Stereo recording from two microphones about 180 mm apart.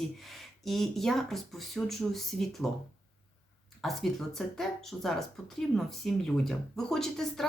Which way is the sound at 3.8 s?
Centre (ahead or behind).